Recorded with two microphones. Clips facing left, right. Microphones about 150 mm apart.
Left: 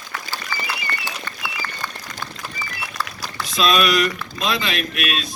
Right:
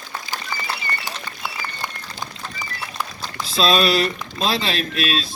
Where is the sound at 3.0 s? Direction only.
15° right (ahead or behind).